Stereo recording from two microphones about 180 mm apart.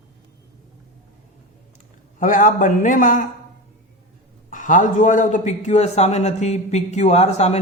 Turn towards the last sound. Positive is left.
turn(degrees=35)  # may be behind; listen again after turning